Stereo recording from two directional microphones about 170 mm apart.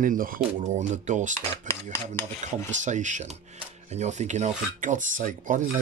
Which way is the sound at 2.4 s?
45° right (ahead or behind).